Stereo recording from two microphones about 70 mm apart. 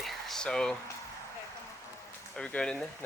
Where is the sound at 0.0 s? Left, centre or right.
Centre.